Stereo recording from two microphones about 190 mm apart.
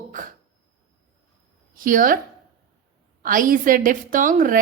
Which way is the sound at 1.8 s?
45° right (ahead or behind).